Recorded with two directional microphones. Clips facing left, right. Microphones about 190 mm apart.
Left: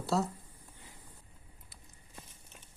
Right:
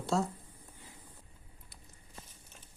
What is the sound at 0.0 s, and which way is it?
Speech, centre (ahead or behind).